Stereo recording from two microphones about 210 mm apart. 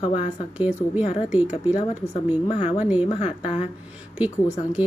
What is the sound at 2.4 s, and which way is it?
Speech, 35° left (ahead or behind).